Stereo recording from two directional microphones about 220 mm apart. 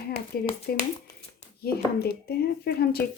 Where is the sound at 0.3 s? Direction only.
45° left (ahead or behind).